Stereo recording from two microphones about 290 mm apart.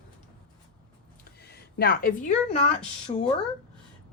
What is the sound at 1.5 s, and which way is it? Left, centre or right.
A woman's voice, left.